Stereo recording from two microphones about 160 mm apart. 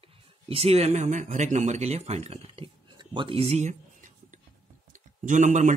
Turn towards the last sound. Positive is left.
turn(degrees=-50)  # may be behind; listen again after turning